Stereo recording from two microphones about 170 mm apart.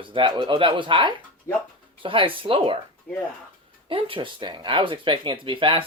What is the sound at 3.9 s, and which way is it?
Speech, 30° right (ahead or behind).